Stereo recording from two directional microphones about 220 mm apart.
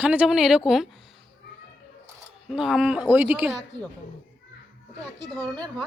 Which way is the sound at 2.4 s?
Centre (ahead or behind).